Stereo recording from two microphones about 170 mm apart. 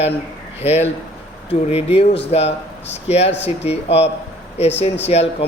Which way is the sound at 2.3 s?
40° left (ahead or behind).